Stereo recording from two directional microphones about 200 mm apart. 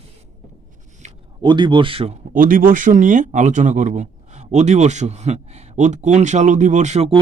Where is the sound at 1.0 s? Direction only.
35° right (ahead or behind).